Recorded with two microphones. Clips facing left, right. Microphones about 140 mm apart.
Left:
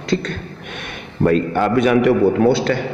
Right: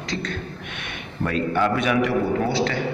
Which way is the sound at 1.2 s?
45° left (ahead or behind).